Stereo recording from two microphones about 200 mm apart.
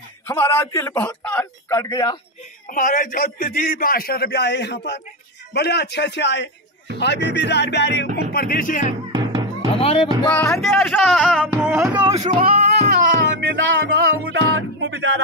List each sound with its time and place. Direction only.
0.3 s a man's voice: 15° left (ahead or behind)
2.7 s a man's voice: 40° left (ahead or behind)
9.1 s music: 20° right (ahead or behind)
9.8 s music: 30° left (ahead or behind)
10.3 s a man's voice: 15° left (ahead or behind)
10.6 s speech: centre (ahead or behind)
11.4 s music: 5° right (ahead or behind)
12.2 s speech: 30° right (ahead or behind)
12.9 s music: 70° right (ahead or behind)
13.8 s music: 50° right (ahead or behind)